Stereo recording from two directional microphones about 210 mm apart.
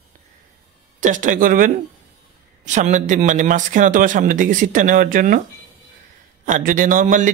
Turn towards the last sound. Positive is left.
turn(degrees=-35)  # may be behind; listen again after turning